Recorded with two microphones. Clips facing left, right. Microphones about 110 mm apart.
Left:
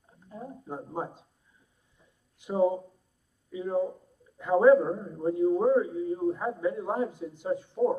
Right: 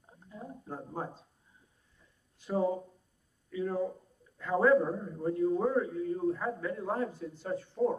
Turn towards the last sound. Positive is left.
turn(degrees=15)  # may be behind; listen again after turning